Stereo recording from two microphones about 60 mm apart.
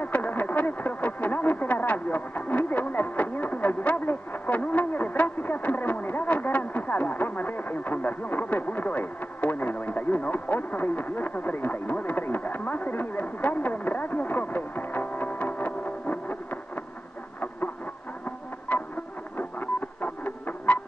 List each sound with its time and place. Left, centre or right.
0.0 s a sound: left
11.5 s radio: left
15.3 s music: left
18.7 s music: left